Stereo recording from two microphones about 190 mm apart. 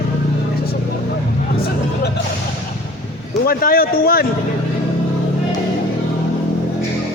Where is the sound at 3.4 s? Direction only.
50° left (ahead or behind).